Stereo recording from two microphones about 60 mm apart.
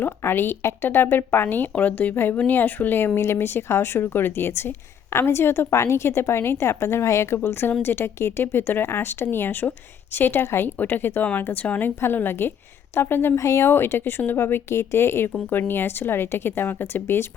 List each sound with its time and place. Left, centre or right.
0.0 s speech: left
3.2 s a woman's voice: left
7.3 s speech: left
11.9 s speech: left
13.3 s speech: left